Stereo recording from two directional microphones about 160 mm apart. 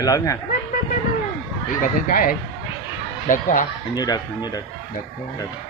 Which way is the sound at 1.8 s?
60° left (ahead or behind).